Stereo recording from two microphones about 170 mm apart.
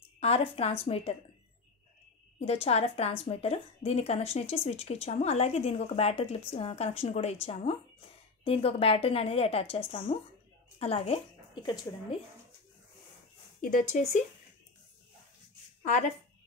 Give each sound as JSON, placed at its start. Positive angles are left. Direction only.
{"t": 0.2, "sound": "a woman's voice", "side_deg": 35}
{"t": 2.4, "sound": "a woman's voice", "side_deg": 35}
{"t": 13.6, "sound": "speech", "side_deg": 50}
{"t": 15.8, "sound": "a woman's voice", "side_deg": 45}